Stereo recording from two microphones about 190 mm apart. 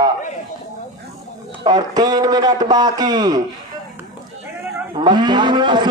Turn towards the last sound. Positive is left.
turn(degrees=-25)  # may be behind; listen again after turning